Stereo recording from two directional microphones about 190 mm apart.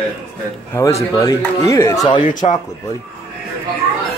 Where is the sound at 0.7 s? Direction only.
15° left (ahead or behind).